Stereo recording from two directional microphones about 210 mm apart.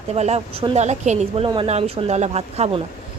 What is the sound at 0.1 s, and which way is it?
Speech, 30° right (ahead or behind).